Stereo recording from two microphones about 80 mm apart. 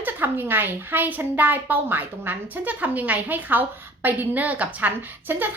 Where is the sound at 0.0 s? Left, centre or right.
Right.